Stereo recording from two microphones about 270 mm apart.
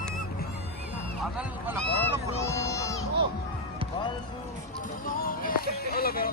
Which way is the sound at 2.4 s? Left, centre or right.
Centre.